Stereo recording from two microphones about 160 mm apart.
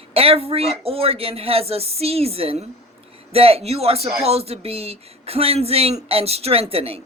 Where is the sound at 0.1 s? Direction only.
35° right (ahead or behind).